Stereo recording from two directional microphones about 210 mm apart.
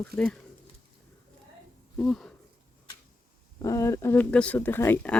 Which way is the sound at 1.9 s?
5° left (ahead or behind).